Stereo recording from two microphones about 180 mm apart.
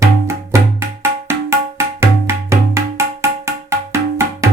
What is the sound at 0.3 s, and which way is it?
Music, 15° right (ahead or behind).